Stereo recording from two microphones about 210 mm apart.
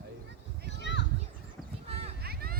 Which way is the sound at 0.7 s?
55° left (ahead or behind).